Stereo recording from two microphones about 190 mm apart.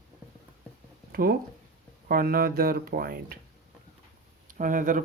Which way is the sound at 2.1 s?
50° right (ahead or behind).